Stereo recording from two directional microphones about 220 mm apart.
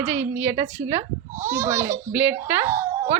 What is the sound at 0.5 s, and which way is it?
Speech, 30° right (ahead or behind).